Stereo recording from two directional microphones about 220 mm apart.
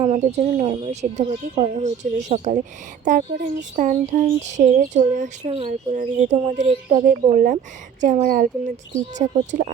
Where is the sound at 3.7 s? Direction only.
35° right (ahead or behind).